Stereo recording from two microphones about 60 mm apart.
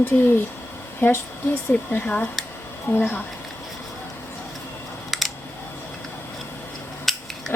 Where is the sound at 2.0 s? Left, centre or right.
Left.